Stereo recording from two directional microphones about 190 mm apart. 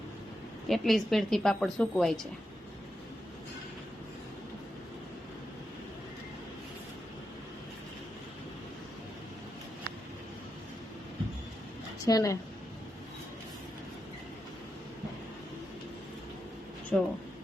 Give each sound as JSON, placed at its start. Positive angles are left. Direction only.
{"t": 0.7, "sound": "speech", "side_deg": 0}
{"t": 12.0, "sound": "speech", "side_deg": 15}
{"t": 16.9, "sound": "speech", "side_deg": 5}